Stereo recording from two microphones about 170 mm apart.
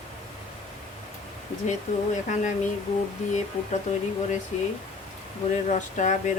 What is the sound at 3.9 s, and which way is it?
Speech, 45° left (ahead or behind).